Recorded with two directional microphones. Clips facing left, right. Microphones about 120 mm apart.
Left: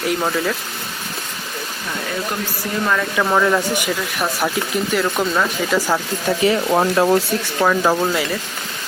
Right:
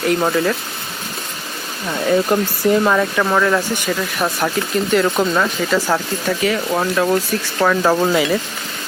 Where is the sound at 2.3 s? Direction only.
30° right (ahead or behind).